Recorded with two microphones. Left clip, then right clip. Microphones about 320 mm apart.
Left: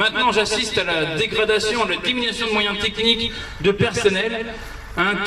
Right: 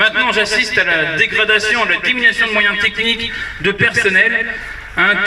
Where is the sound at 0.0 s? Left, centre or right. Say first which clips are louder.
Right 5 dB; centre.